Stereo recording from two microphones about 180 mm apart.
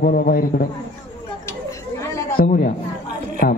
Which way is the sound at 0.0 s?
55° left (ahead or behind).